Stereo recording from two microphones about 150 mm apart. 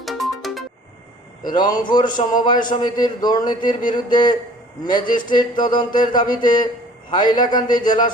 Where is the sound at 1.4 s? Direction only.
30° left (ahead or behind).